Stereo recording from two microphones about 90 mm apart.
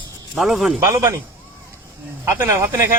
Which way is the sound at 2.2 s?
30° right (ahead or behind).